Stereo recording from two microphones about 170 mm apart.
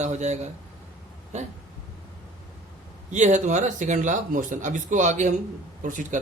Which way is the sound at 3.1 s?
45° right (ahead or behind).